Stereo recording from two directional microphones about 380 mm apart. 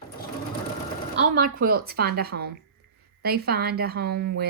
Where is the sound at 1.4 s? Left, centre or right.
Right.